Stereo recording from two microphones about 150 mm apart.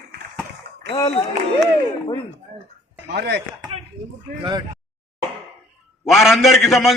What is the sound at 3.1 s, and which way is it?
Speech, 90° right.